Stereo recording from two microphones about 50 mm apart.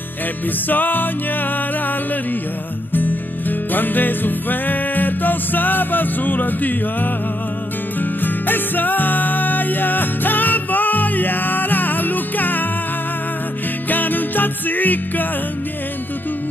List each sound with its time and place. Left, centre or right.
0.7 s music: left
2.9 s music: left
13.8 s music: left